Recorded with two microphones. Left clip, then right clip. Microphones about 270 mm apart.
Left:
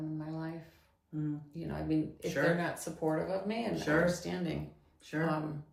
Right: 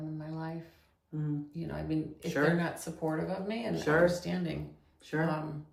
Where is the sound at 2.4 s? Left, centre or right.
Centre.